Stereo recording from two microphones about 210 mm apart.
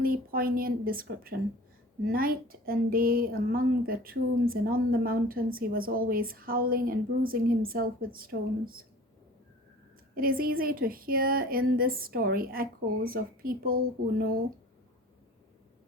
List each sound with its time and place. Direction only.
0.0 s speech: 45° right (ahead or behind)
10.2 s speech: 45° right (ahead or behind)